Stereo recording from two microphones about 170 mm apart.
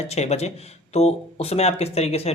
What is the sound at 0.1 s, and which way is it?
A man's voice, 40° left (ahead or behind).